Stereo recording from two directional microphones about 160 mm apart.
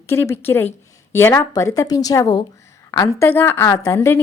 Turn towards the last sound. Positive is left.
turn(degrees=15)  # may be behind; listen again after turning